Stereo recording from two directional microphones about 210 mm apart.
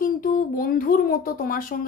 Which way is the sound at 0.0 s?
40° left (ahead or behind).